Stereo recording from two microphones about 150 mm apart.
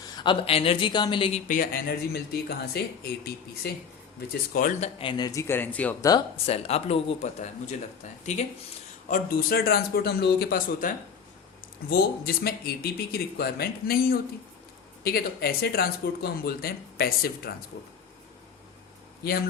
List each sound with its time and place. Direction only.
0.0 s speech: 30° left (ahead or behind)
1.5 s speech: 65° left (ahead or behind); by 3.7 s 90° left
4.8 s speech: 35° left (ahead or behind); by 6.0 s 10° left (ahead or behind)
6.0 s speech: 25° left (ahead or behind)
6.3 s speech: 40° left (ahead or behind)
9.0 s speech: 70° left (ahead or behind)
11.9 s speech: 90° left
19.2 s speech: 90° left